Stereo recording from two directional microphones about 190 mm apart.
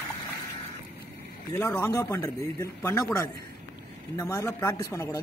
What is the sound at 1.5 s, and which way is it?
A man's voice, 15° left (ahead or behind).